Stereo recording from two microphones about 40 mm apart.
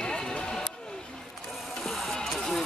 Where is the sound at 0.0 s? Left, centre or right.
Centre.